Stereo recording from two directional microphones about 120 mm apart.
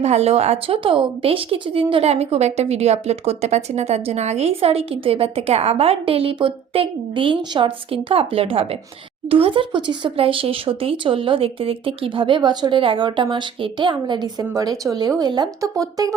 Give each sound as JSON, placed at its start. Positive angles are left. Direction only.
{"t": 0.0, "sound": "a woman's voice", "side_deg": -65}